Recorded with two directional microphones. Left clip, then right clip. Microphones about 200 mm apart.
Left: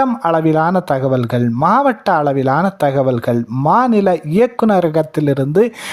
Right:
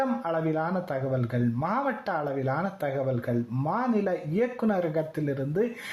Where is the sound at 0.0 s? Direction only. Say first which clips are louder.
Left 13 dB; 40° left (ahead or behind).